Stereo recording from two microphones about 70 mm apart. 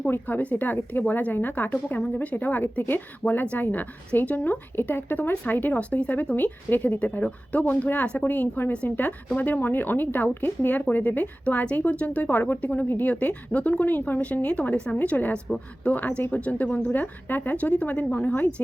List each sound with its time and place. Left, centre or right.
0.1 s a woman's voice: left